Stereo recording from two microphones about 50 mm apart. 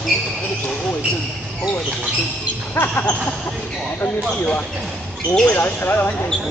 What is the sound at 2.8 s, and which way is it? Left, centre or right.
Speech, left.